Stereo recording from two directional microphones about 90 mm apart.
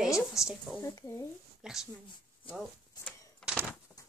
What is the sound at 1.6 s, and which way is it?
Speech, 5° right (ahead or behind).